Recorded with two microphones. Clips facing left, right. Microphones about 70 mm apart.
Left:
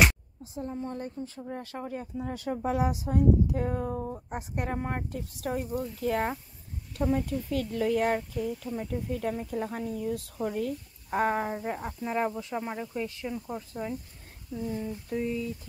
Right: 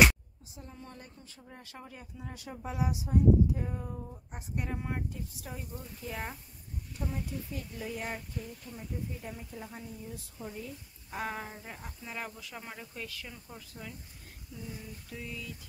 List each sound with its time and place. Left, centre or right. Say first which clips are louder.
0.4 s speech: left 13 dB; left
4.7 s speech: left 5 dB; left
5.1 s a woman's voice: left 10 dB; left
11.1 s speech: left 10 dB; left